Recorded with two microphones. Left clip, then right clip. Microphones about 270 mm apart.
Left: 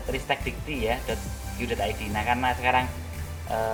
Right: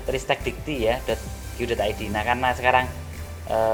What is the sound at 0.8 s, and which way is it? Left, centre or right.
Speech, right.